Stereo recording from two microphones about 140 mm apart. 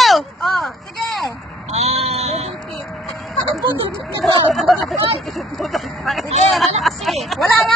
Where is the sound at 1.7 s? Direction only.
50° right (ahead or behind).